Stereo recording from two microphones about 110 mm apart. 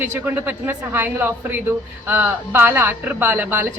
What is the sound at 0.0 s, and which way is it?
Speech, 15° right (ahead or behind).